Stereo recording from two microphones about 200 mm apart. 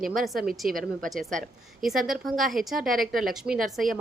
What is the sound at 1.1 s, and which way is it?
A woman's voice, centre (ahead or behind).